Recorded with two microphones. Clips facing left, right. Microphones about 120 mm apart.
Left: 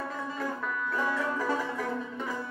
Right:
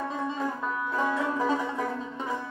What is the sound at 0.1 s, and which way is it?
Music, 20° right (ahead or behind).